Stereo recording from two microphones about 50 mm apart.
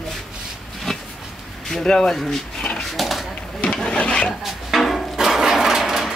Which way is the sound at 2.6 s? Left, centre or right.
Left.